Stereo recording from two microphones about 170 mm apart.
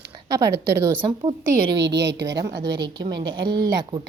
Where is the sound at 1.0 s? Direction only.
30° right (ahead or behind).